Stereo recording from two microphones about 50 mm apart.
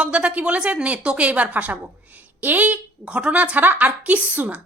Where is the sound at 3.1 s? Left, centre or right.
Right.